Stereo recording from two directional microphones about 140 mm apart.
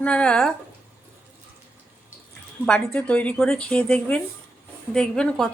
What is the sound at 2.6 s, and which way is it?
A woman's voice, 5° left (ahead or behind).